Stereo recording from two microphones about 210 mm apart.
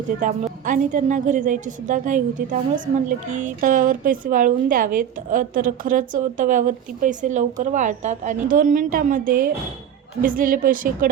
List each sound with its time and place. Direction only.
0.2 s a woman's voice: 40° right (ahead or behind)